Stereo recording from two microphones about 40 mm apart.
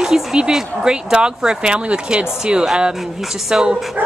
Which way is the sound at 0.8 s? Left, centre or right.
Right.